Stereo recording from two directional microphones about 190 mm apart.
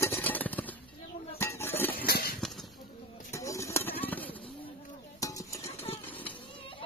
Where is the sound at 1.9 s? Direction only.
55° left (ahead or behind).